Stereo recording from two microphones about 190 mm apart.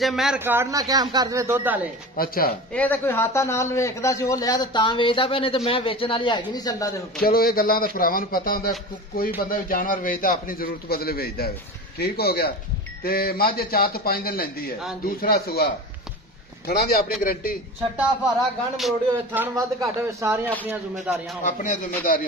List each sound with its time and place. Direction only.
0.0 s speech: centre (ahead or behind)
0.4 s speech: 10° right (ahead or behind)
2.1 s a man's voice: 50° left (ahead or behind)
2.7 s a man's voice: 10° left (ahead or behind)
7.2 s a man's voice: 50° left (ahead or behind)
18.8 s speech: centre (ahead or behind)
19.4 s speech: 15° right (ahead or behind)
21.5 s a man's voice: 40° left (ahead or behind)